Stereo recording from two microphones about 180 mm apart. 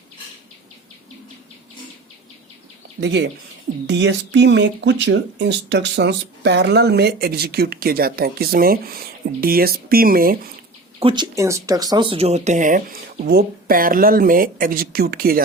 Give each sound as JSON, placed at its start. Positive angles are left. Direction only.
{"t": 3.0, "sound": "speech", "side_deg": -70}
{"t": 11.0, "sound": "speech", "side_deg": -25}